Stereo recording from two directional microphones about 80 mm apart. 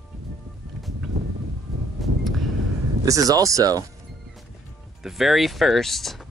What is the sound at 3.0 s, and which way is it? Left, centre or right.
Speech, right.